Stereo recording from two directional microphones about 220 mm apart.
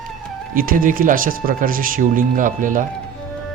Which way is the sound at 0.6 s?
40° right (ahead or behind).